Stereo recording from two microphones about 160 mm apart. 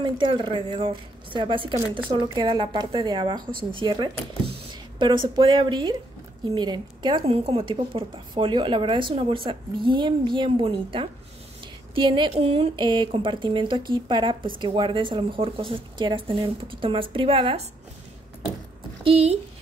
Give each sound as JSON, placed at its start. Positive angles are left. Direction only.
{"t": 0.0, "sound": "a woman's voice", "side_deg": -30}
{"t": 5.3, "sound": "a woman's voice", "side_deg": -30}
{"t": 19.0, "sound": "a woman's voice", "side_deg": -35}